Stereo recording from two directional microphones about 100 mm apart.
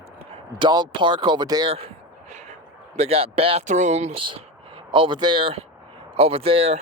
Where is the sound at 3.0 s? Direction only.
85° right; by 4.4 s 65° right (ahead or behind).